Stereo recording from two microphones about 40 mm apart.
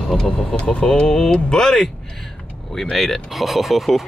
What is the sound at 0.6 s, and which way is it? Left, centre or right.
Speech, left.